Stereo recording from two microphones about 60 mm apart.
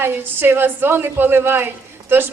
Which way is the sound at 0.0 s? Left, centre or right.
Right.